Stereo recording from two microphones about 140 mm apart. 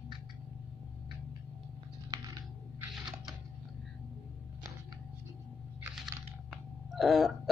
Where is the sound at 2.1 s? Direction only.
30° right (ahead or behind).